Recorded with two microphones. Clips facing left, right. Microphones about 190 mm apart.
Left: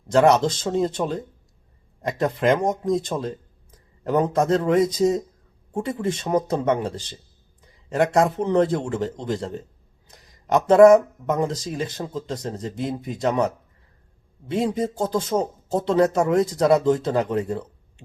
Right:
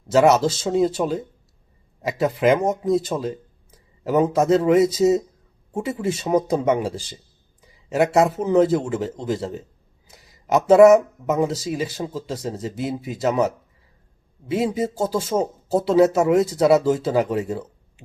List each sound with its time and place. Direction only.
0.1 s a man's voice: 5° right (ahead or behind)